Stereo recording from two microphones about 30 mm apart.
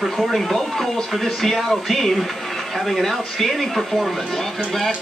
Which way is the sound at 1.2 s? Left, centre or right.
Centre.